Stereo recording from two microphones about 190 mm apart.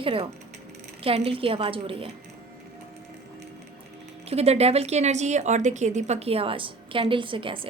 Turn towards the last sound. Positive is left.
turn(degrees=-25)  # may be behind; listen again after turning